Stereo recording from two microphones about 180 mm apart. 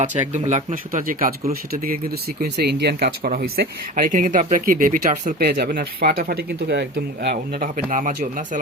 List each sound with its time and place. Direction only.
0.0 s speech: 40° right (ahead or behind)
2.4 s speech: 60° right (ahead or behind)
7.9 s speech: 45° right (ahead or behind)